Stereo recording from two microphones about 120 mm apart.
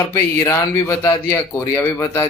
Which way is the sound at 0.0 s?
25° left (ahead or behind).